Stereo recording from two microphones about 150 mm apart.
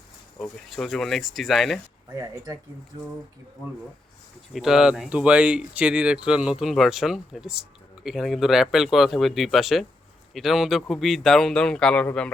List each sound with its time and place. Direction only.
0.3 s speech: 5° left (ahead or behind)
2.1 s speech: 20° right (ahead or behind)
4.5 s speech: 5° right (ahead or behind)